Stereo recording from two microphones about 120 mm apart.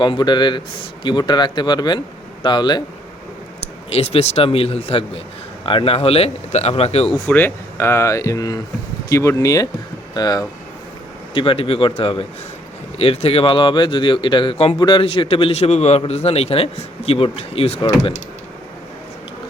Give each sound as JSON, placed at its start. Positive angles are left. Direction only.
{"t": 0.0, "sound": "speech", "side_deg": 40}
{"t": 3.8, "sound": "a man's voice", "side_deg": 55}
{"t": 7.1, "sound": "speech", "side_deg": 10}
{"t": 11.3, "sound": "speech", "side_deg": 45}
{"t": 14.8, "sound": "speech", "side_deg": 40}
{"t": 15.0, "sound": "a man's voice", "side_deg": 50}